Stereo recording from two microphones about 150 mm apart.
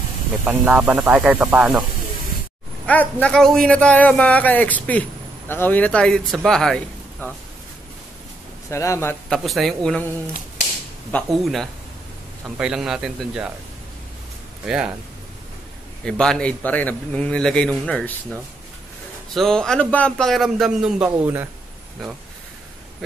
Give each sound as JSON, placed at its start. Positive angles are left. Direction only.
{"t": 0.5, "sound": "speech", "side_deg": -10}
{"t": 2.9, "sound": "speech", "side_deg": 10}
{"t": 8.6, "sound": "speech", "side_deg": 20}
{"t": 9.3, "sound": "a man's voice", "side_deg": 0}
{"t": 11.1, "sound": "a man's voice", "side_deg": 5}
{"t": 14.7, "sound": "a man's voice", "side_deg": -5}
{"t": 16.1, "sound": "speech", "side_deg": 5}
{"t": 19.3, "sound": "a man's voice", "side_deg": 5}